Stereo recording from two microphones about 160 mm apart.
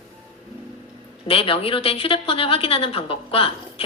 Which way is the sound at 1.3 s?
35° left (ahead or behind).